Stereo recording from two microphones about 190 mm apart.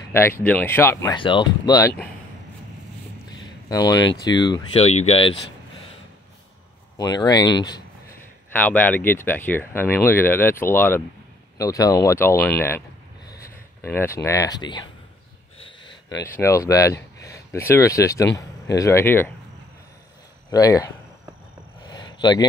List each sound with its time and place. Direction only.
0.1 s speech: 10° left (ahead or behind)
1.1 s speech: 25° left (ahead or behind)
3.6 s speech: 20° left (ahead or behind)
7.0 s speech: 20° left (ahead or behind)
8.5 s speech: 10° left (ahead or behind)
20.5 s speech: 20° left (ahead or behind)
21.8 s a sound: 20° left (ahead or behind)